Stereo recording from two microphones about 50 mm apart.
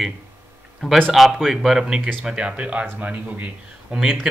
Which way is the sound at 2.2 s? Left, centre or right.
Right.